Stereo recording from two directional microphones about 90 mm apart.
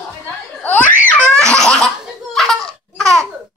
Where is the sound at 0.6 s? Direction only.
20° left (ahead or behind).